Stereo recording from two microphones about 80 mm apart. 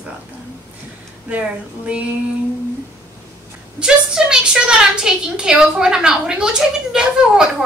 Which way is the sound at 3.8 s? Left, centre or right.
Centre.